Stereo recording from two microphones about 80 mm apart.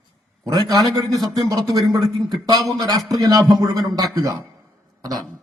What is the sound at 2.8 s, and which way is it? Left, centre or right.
A man's voice, right.